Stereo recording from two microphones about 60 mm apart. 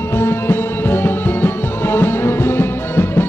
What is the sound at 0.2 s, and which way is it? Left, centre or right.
Music, left.